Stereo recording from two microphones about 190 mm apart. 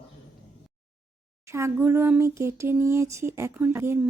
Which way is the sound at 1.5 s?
15° right (ahead or behind).